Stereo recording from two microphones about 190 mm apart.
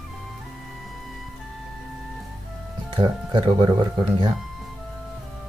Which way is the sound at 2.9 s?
25° right (ahead or behind).